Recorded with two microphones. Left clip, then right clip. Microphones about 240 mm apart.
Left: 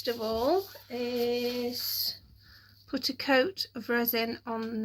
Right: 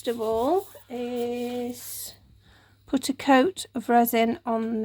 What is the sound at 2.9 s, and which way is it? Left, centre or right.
Speech, right.